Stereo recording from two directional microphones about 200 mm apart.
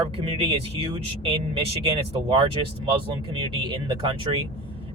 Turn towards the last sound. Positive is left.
turn(degrees=-25)  # may be behind; listen again after turning